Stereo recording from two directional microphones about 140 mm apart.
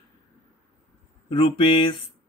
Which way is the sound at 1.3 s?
40° left (ahead or behind).